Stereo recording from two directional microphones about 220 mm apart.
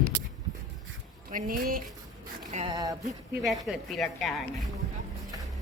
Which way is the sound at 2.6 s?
15° right (ahead or behind).